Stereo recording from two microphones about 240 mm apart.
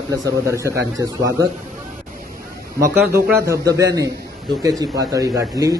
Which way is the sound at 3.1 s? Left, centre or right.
Centre.